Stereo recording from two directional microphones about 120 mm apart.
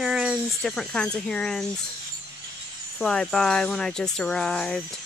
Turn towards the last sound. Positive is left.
turn(degrees=5)  # may be behind; listen again after turning